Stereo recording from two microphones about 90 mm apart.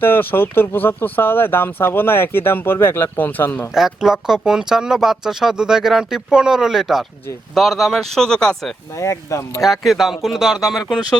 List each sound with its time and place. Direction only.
0.0 s speech: 25° left (ahead or behind)
3.8 s speech: 5° right (ahead or behind)
9.0 s speech: 35° left (ahead or behind)
9.6 s speech: centre (ahead or behind)